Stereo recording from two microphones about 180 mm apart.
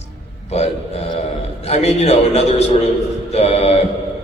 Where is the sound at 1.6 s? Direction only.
40° left (ahead or behind).